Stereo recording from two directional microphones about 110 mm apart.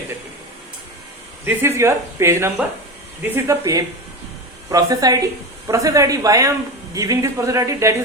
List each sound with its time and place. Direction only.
1.5 s speech: 20° right (ahead or behind)